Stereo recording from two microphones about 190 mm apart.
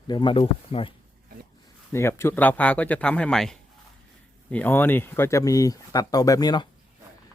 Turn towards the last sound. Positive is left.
turn(degrees=20)  # may be behind; listen again after turning